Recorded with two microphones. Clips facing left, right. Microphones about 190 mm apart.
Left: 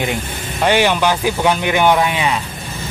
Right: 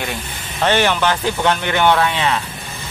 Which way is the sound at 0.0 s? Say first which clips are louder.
Left 5 dB; 15° left (ahead or behind).